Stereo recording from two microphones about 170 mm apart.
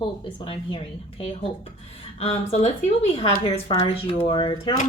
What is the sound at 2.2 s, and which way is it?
A woman's voice, 40° left (ahead or behind).